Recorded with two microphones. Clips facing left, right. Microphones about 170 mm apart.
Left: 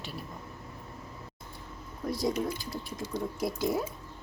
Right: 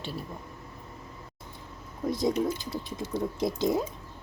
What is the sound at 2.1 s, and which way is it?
Speech, 20° right (ahead or behind).